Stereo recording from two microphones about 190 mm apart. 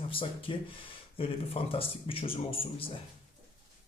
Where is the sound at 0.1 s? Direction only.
30° left (ahead or behind).